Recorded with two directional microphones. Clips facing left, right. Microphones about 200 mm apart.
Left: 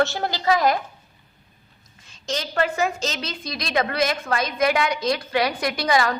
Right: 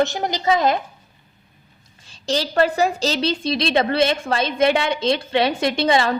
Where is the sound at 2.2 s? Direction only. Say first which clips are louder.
Right 5 dB; 35° right (ahead or behind).